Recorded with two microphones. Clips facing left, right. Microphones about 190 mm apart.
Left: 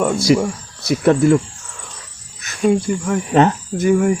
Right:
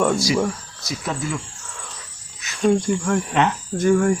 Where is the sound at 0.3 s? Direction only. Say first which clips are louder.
Left 6 dB; 60° left (ahead or behind).